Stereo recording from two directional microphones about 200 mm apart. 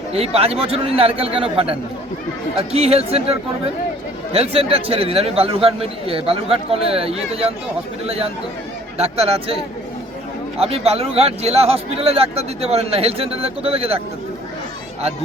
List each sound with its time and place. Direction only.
0.1 s a man's voice: 30° right (ahead or behind)
10.6 s a man's voice: 30° right (ahead or behind)